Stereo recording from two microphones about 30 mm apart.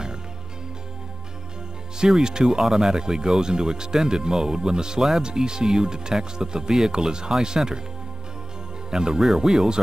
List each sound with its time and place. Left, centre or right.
2.0 s speech: right
2.6 s speech: centre
2.9 s speech: right
8.9 s speech: centre